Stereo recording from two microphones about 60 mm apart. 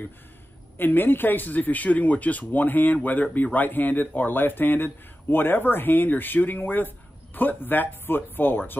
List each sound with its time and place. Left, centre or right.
0.7 s speech: left